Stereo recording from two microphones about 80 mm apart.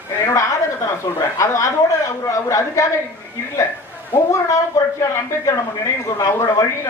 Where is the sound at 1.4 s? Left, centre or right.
Left.